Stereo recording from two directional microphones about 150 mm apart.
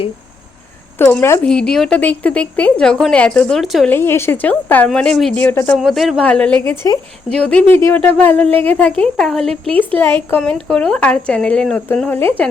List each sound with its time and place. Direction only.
0.9 s a woman's voice: 15° left (ahead or behind)
1.5 s a woman's voice: 5° left (ahead or behind)
3.8 s a woman's voice: 15° left (ahead or behind)
5.7 s a woman's voice: centre (ahead or behind); by 7.0 s 20° left (ahead or behind)
7.3 s a woman's voice: 5° left (ahead or behind)
7.8 s a woman's voice: 20° left (ahead or behind)